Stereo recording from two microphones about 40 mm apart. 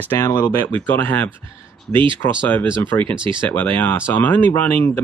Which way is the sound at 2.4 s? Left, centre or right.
Left.